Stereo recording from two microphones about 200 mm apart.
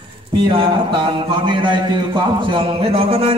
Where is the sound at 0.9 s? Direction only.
25° right (ahead or behind).